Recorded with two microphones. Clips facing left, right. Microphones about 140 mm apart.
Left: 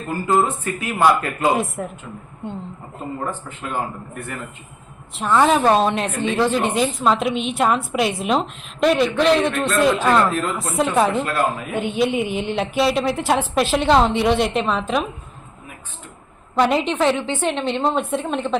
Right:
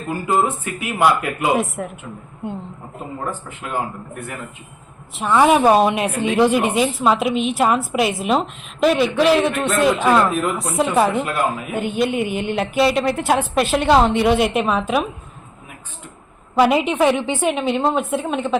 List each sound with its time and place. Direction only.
0.6 s a woman's voice: 10° right (ahead or behind)
1.5 s a woman's voice: centre (ahead or behind)
3.2 s a woman's voice: 10° right (ahead or behind)
10.6 s a woman's voice: centre (ahead or behind)
11.1 s a woman's voice: 15° right (ahead or behind)
11.7 s a woman's voice: centre (ahead or behind)
16.6 s a woman's voice: 5° right (ahead or behind)